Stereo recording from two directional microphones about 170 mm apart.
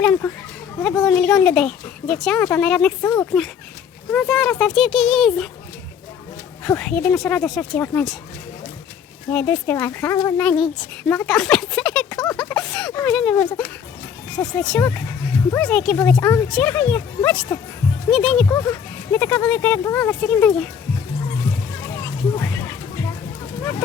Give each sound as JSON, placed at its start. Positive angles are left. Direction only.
{"t": 0.0, "sound": "speech", "side_deg": 10}
{"t": 6.7, "sound": "speech", "side_deg": 5}
{"t": 9.3, "sound": "speech", "side_deg": 10}
{"t": 10.4, "sound": "speech", "side_deg": 5}
{"t": 11.1, "sound": "a sound", "side_deg": 5}
{"t": 12.9, "sound": "speech", "side_deg": 20}
{"t": 13.1, "sound": "speech", "side_deg": 5}
{"t": 18.4, "sound": "speech", "side_deg": 15}
{"t": 21.9, "sound": "music", "side_deg": 15}